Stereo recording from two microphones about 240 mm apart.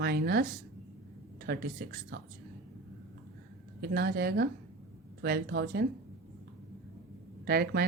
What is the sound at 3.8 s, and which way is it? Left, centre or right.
Speech, right.